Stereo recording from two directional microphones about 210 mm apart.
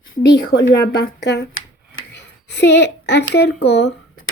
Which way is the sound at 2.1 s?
55° left (ahead or behind).